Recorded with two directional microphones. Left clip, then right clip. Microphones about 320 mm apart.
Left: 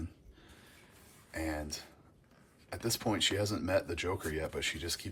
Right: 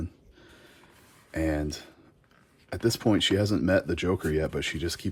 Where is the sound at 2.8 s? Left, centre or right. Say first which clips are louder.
Right 8 dB; right.